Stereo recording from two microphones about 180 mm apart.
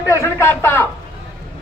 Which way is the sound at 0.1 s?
15° left (ahead or behind).